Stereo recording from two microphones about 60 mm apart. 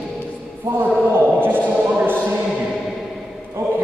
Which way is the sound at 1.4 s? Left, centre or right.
Right.